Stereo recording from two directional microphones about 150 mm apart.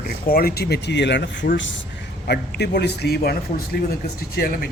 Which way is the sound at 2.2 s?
90° left.